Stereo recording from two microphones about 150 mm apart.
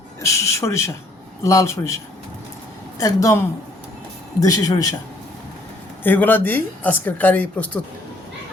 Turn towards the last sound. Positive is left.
turn(degrees=10)  # may be behind; listen again after turning